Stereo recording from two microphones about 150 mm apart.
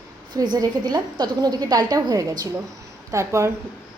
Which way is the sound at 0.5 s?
25° right (ahead or behind).